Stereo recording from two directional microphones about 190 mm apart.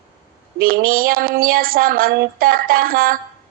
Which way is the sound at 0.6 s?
50° right (ahead or behind).